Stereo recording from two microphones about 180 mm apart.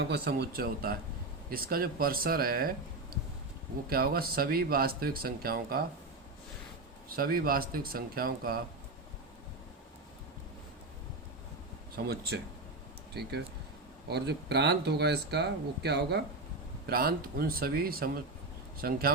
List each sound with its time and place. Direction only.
0.0 s speech: 65° right (ahead or behind)
7.2 s speech: 55° right (ahead or behind)
11.9 s speech: 60° right (ahead or behind)
16.8 s speech: 55° right (ahead or behind)